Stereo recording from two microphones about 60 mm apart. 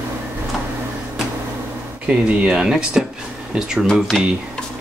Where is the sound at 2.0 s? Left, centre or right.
Right.